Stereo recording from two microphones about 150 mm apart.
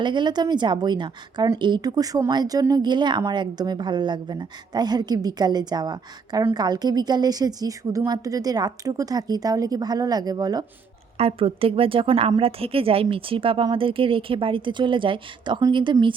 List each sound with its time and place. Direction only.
0.0 s speech: 30° right (ahead or behind)
11.2 s speech: 40° right (ahead or behind)